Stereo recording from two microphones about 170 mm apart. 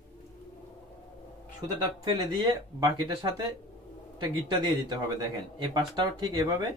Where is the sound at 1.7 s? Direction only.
25° right (ahead or behind).